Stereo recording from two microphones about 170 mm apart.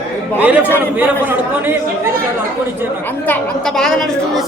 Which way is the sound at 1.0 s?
10° right (ahead or behind).